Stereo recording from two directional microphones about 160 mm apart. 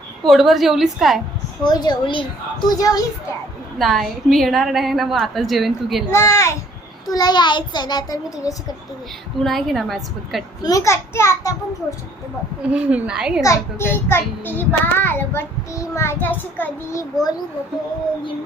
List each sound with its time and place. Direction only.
0.3 s a woman's voice: centre (ahead or behind)
1.6 s a child's voice: 25° left (ahead or behind)
3.8 s a woman's voice: centre (ahead or behind)
6.1 s child singing: 15° left (ahead or behind)
7.1 s a child's voice: 25° left (ahead or behind)
9.4 s a woman's voice: centre (ahead or behind)
10.6 s a child's voice: 20° left (ahead or behind)
12.7 s a woman's voice: 5° right (ahead or behind)
13.4 s a child's voice: 20° left (ahead or behind)
14.1 s child singing: 15° left (ahead or behind)